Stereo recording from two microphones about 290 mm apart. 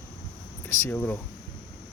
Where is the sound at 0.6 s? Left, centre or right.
Centre.